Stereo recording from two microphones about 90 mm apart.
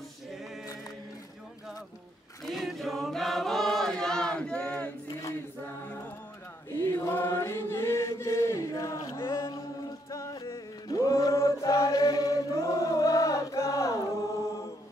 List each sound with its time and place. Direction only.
2.4 s chant: centre (ahead or behind)
6.8 s chant: 30° left (ahead or behind)
10.5 s chant: 35° left (ahead or behind)